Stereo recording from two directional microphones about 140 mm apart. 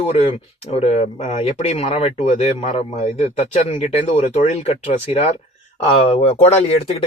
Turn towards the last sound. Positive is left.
turn(degrees=45)  # may be behind; listen again after turning